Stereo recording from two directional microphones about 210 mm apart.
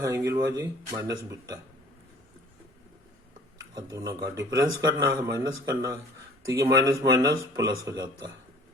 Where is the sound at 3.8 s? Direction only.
15° right (ahead or behind).